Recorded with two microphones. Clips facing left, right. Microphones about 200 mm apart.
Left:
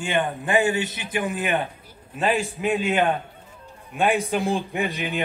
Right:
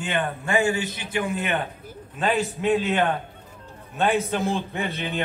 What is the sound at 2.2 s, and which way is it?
A man's voice, 10° left (ahead or behind).